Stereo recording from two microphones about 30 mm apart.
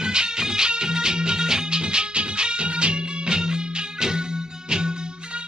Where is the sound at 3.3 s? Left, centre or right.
Right.